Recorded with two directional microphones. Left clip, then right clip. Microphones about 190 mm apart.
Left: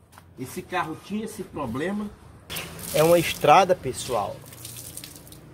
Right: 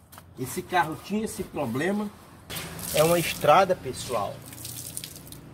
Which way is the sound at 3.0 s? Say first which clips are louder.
Left 3 dB; 60° left (ahead or behind).